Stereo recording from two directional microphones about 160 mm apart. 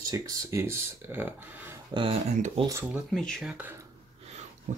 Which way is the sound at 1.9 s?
25° right (ahead or behind).